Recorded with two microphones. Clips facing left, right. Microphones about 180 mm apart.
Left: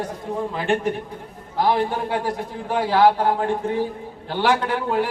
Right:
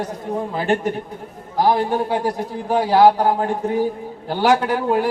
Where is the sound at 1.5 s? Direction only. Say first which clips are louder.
Right 3 dB; 40° right (ahead or behind).